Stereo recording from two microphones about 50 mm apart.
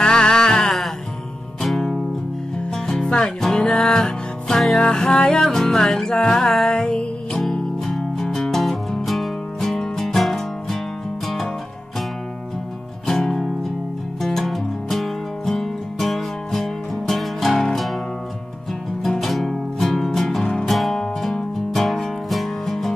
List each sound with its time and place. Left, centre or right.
0.0 s a sound: centre
1.6 s music: centre
2.7 s music: centre
13.0 s music: centre
19.0 s music: centre